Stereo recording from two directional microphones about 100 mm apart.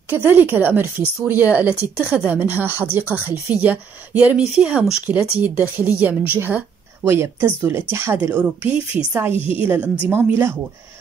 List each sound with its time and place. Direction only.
0.2 s a woman's voice: 20° right (ahead or behind)
9.4 s a woman's voice: 65° left (ahead or behind)
10.0 s speech: 25° right (ahead or behind)